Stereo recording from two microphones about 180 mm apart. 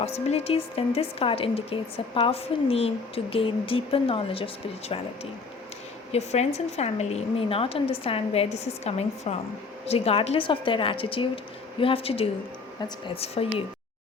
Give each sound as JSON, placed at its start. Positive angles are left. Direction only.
{"t": 0.0, "sound": "a woman's voice", "side_deg": 35}